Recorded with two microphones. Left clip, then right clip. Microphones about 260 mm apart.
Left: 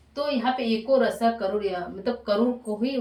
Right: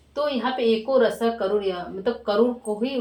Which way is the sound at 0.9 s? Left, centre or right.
Centre.